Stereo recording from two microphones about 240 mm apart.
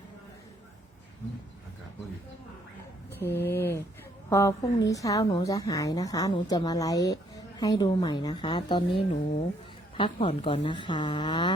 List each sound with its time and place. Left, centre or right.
3.1 s a woman's voice: centre